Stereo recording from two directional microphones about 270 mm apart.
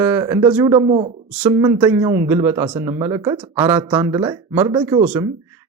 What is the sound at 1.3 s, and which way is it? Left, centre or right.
Speech, centre.